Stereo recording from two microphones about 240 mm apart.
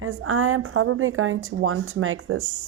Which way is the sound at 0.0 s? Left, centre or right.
Right.